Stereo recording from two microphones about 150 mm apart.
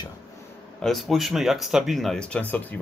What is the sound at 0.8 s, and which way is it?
Speech, centre (ahead or behind).